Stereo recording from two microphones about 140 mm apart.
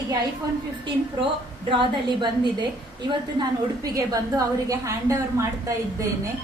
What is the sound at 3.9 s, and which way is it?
A woman's voice, 25° right (ahead or behind).